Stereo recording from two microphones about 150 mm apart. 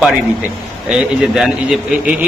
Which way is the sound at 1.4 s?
5° right (ahead or behind).